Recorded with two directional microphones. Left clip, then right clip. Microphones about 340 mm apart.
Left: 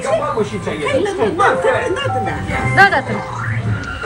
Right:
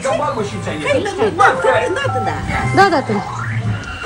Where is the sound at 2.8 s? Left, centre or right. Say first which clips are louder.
Left 1 dB; centre.